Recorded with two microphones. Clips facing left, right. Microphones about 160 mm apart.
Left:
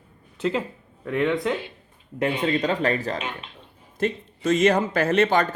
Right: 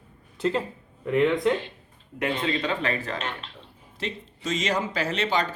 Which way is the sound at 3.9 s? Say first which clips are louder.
Left 8 dB; 50° left (ahead or behind).